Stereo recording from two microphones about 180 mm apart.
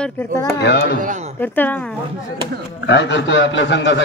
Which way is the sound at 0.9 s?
45° right (ahead or behind).